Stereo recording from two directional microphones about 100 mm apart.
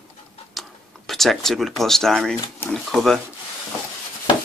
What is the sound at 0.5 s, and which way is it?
Speech, centre (ahead or behind).